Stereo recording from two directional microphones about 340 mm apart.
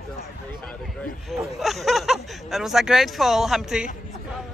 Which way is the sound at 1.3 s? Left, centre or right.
Centre.